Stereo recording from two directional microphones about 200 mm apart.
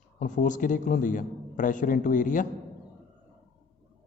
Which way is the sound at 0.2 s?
40° left (ahead or behind).